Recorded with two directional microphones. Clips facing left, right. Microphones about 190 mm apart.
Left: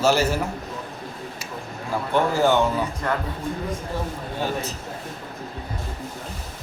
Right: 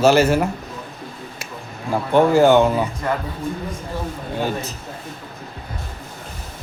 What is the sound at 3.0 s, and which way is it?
Speech, 5° right (ahead or behind).